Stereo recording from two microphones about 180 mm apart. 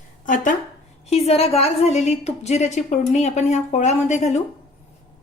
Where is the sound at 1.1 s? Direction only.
35° left (ahead or behind).